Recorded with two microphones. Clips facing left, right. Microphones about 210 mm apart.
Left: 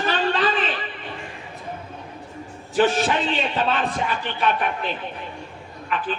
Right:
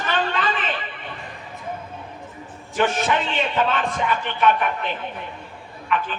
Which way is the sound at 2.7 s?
30° left (ahead or behind).